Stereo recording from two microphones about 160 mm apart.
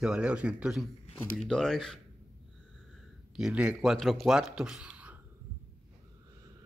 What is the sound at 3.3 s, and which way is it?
Speech, 5° right (ahead or behind).